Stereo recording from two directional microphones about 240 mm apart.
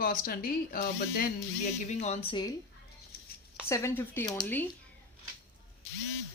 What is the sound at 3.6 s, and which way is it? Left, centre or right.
Speech, centre.